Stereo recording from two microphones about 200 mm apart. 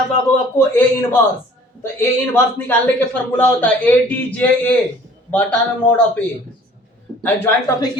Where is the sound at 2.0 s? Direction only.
15° left (ahead or behind).